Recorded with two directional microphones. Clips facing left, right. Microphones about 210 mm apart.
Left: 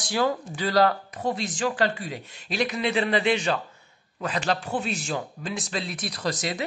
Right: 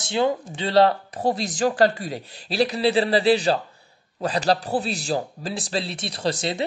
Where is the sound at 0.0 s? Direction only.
25° right (ahead or behind).